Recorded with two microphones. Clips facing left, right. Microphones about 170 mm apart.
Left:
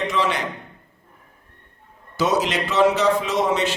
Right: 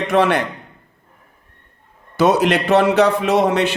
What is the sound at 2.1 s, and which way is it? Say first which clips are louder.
A man's voice: right 6 dB; 60° right (ahead or behind).